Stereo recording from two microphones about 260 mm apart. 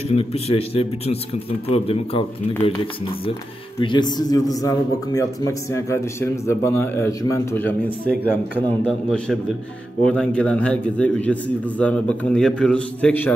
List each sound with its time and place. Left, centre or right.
0.2 s a man's voice: left; by 13.3 s centre